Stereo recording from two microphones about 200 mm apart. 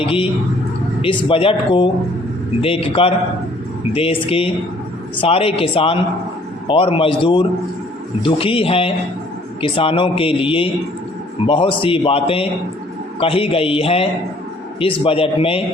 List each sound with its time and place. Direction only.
0.0 s a man's voice: 25° left (ahead or behind)